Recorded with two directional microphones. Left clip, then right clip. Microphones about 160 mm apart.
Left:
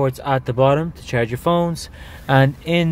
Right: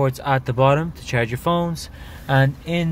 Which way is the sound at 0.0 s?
20° left (ahead or behind).